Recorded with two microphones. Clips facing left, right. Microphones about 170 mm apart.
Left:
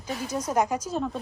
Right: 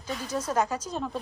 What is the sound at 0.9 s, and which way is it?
Speech, centre (ahead or behind).